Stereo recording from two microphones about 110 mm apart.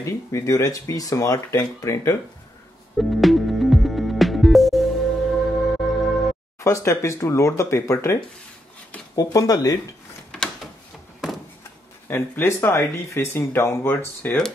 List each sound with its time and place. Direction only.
0.0 s speech: 30° left (ahead or behind)
3.0 s music: centre (ahead or behind)
6.6 s speech: 25° left (ahead or behind)
10.3 s mechanisms: 5° left (ahead or behind)
12.1 s speech: 20° left (ahead or behind)